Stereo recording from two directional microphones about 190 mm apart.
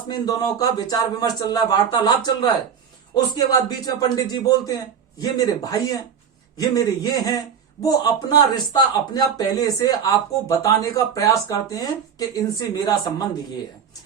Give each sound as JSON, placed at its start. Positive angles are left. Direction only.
{"t": 0.3, "sound": "speech", "side_deg": 20}